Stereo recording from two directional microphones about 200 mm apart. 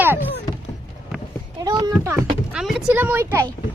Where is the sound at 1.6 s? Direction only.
20° right (ahead or behind).